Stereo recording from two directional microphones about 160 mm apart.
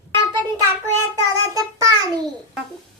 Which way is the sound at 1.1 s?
20° right (ahead or behind).